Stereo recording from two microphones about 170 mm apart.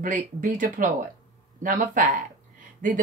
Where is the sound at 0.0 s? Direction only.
50° right (ahead or behind).